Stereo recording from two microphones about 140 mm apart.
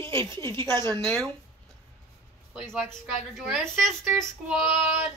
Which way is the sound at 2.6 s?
5° left (ahead or behind).